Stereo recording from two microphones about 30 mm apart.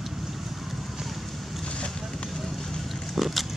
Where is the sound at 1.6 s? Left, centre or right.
Left.